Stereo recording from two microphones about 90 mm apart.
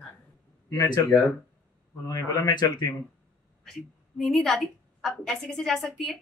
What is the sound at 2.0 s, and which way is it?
Speech, 45° left (ahead or behind).